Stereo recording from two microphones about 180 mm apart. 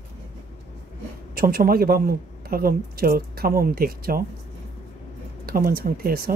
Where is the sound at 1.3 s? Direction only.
55° right (ahead or behind).